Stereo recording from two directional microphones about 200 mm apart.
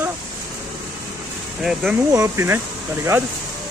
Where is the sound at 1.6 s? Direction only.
Centre (ahead or behind).